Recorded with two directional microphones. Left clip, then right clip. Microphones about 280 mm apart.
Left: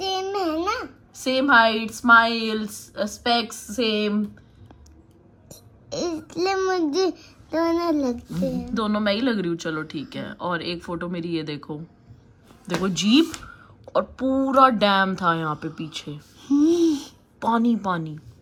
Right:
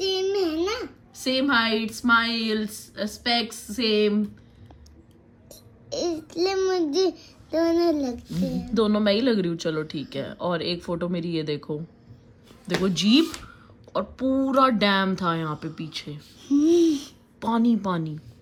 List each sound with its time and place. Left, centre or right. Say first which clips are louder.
0.0 s babbling: right 1 dB; centre
1.1 s a woman's voice: left 5 dB; centre
5.5 s a sound: even; centre
8.3 s a woman's voice: left 3 dB; centre
16.6 s babbling: even; centre
17.4 s a woman's voice: left 2 dB; centre